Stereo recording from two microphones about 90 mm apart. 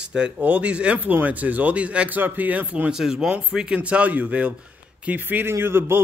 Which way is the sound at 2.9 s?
5° right (ahead or behind).